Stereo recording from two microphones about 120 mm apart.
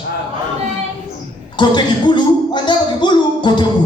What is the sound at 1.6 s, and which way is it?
Speech, 40° left (ahead or behind).